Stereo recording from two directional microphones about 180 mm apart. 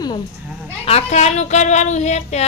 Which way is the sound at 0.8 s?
35° left (ahead or behind).